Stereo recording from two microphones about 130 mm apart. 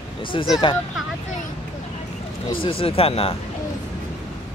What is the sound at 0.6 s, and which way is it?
Speech, 40° left (ahead or behind).